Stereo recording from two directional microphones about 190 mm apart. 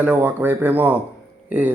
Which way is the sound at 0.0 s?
10° right (ahead or behind).